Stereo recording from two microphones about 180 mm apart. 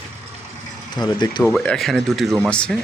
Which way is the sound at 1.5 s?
5° left (ahead or behind).